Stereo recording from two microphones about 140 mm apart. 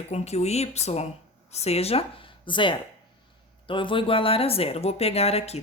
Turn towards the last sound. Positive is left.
turn(degrees=45)  # may be behind; listen again after turning